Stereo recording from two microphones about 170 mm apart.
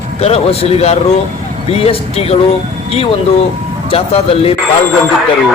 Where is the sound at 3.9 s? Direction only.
35° left (ahead or behind).